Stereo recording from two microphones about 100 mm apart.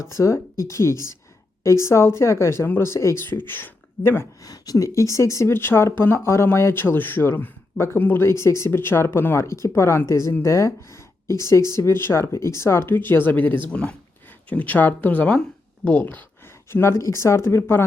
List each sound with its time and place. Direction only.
0.0 s speech: 30° left (ahead or behind)
4.4 s speech: 35° left (ahead or behind); by 16.2 s 15° left (ahead or behind)
16.7 s speech: 25° left (ahead or behind)